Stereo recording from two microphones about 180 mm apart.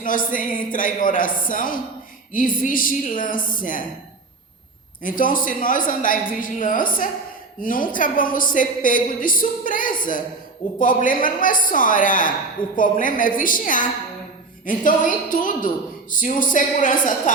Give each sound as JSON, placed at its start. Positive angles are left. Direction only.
{"t": 0.0, "sound": "a woman's voice", "side_deg": 50}
{"t": 5.0, "sound": "a woman's voice", "side_deg": 50}